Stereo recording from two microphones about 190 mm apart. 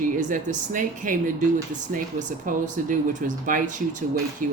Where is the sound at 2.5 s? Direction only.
45° right (ahead or behind).